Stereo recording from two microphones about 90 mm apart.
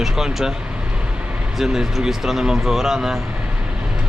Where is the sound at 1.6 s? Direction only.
5° right (ahead or behind).